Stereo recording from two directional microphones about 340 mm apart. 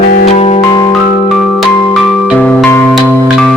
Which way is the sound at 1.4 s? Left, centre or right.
Centre.